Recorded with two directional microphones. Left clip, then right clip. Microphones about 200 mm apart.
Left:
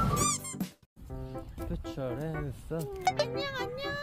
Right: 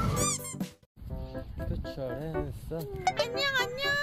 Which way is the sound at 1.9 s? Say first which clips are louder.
Right 2 dB; 50° left (ahead or behind).